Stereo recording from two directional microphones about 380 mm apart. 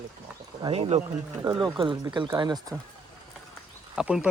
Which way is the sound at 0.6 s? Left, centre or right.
Centre.